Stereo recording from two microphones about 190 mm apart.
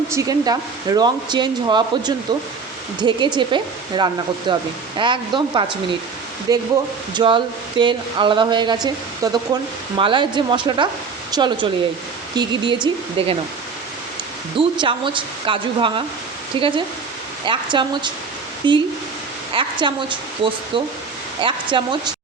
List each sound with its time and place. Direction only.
0.1 s speech: 20° right (ahead or behind)
14.6 s speech: 25° right (ahead or behind)